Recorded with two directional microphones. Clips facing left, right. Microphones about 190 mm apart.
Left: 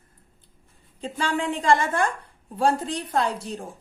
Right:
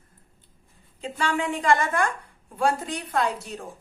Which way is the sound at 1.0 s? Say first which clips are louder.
Left 1 dB; 30° left (ahead or behind).